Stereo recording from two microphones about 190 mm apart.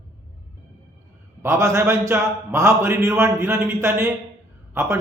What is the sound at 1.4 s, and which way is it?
A man's voice, 15° right (ahead or behind).